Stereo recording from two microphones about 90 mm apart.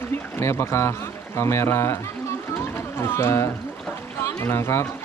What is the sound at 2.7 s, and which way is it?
Music, 30° left (ahead or behind).